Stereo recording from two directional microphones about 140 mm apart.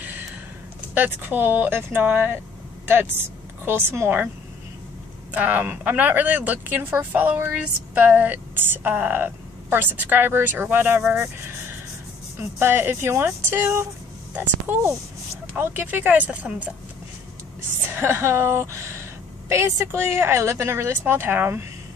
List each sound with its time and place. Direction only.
0.9 s a woman's voice: 15° right (ahead or behind)
5.3 s speech: 10° right (ahead or behind)
17.9 s speech: 20° right (ahead or behind)